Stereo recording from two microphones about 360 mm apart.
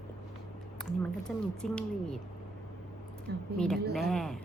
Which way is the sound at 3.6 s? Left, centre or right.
Centre.